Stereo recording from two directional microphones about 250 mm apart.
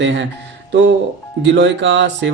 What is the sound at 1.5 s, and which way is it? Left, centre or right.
Speech, right.